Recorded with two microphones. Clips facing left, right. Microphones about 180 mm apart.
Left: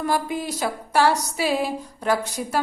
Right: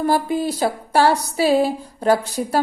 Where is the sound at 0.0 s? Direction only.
30° right (ahead or behind).